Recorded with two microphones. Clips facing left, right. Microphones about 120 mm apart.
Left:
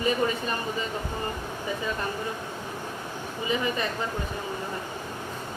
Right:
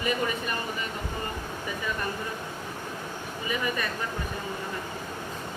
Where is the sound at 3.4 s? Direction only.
25° left (ahead or behind).